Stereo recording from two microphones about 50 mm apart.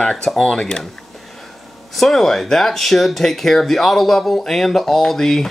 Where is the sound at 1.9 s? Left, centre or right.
Centre.